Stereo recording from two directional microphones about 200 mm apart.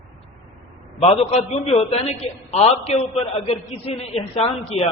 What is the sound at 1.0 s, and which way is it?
A man's voice, 30° left (ahead or behind).